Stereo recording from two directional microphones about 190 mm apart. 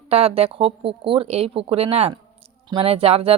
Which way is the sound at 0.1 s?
30° right (ahead or behind).